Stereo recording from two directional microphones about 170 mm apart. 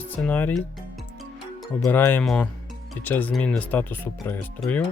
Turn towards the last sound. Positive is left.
turn(degrees=10)  # may be behind; listen again after turning